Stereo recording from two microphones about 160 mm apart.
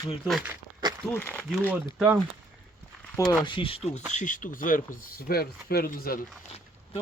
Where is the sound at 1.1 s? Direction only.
10° left (ahead or behind).